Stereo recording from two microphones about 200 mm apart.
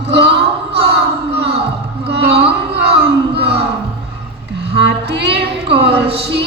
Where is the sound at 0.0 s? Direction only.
60° right (ahead or behind).